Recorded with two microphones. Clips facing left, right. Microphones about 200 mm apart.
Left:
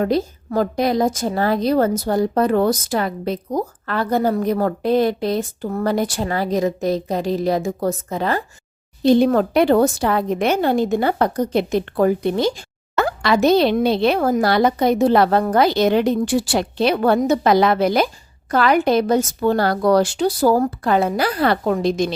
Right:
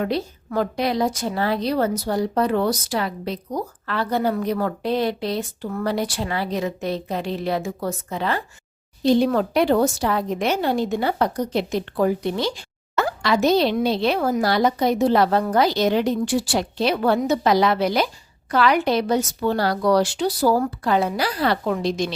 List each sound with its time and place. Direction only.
0.0 s a woman's voice: 40° left (ahead or behind)
9.0 s a woman's voice: 55° left (ahead or behind)